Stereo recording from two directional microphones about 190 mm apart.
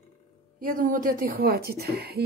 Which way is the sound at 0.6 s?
45° right (ahead or behind).